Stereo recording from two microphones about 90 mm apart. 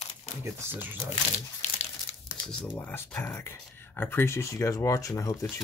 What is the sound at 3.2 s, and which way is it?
Speech, 30° left (ahead or behind).